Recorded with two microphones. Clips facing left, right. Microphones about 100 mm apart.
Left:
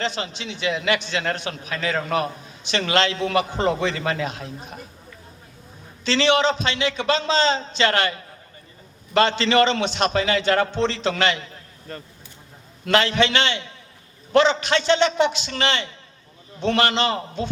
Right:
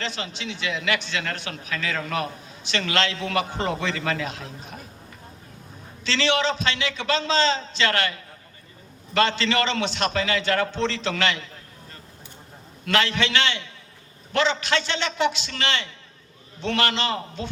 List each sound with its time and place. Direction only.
0.0 s a man's voice: 20° left (ahead or behind)
6.1 s a man's voice: 20° left (ahead or behind)
11.9 s speech: 55° left (ahead or behind)
12.8 s a man's voice: 20° left (ahead or behind)